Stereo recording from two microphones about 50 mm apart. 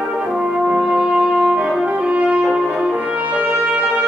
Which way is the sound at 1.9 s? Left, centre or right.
Right.